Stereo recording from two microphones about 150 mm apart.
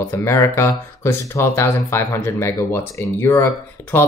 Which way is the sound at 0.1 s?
20° left (ahead or behind).